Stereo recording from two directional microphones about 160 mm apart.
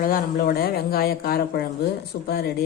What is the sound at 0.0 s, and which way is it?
Speech, 60° left (ahead or behind).